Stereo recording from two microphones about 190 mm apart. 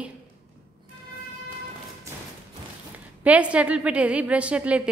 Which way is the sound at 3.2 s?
5° right (ahead or behind).